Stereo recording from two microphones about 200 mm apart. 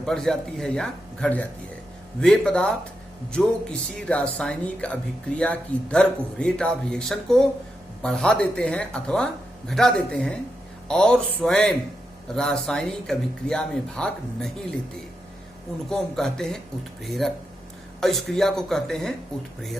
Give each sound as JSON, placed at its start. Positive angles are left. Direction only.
{"t": 0.0, "sound": "speech", "side_deg": 0}
{"t": 15.9, "sound": "speech", "side_deg": 0}